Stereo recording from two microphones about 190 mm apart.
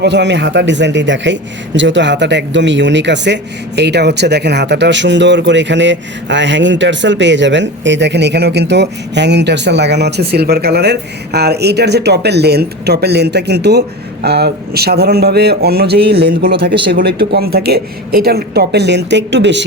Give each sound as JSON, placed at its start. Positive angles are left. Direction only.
{"t": 0.0, "sound": "a man's voice", "side_deg": -65}